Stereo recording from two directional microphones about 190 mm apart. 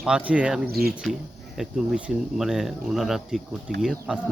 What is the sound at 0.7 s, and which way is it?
Speech, 55° right (ahead or behind).